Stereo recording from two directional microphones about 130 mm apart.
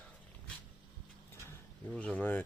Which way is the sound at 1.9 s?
10° left (ahead or behind).